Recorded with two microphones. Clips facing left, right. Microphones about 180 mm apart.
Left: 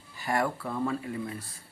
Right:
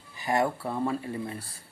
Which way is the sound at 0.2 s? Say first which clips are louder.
Right 2 dB; 20° right (ahead or behind).